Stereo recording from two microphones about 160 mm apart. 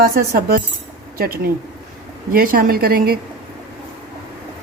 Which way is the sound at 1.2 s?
65° right (ahead or behind).